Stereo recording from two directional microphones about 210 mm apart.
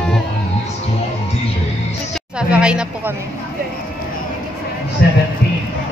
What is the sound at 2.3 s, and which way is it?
Speech, 5° right (ahead or behind).